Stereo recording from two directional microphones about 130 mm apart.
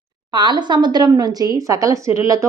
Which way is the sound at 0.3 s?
35° right (ahead or behind).